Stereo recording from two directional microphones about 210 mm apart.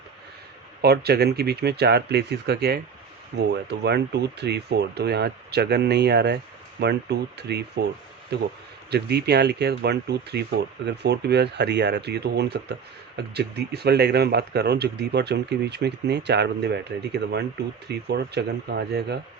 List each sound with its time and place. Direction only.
0.8 s speech: 50° right (ahead or behind)
8.9 s speech: 50° right (ahead or behind)